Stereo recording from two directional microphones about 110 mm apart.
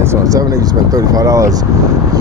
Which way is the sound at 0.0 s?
30° right (ahead or behind).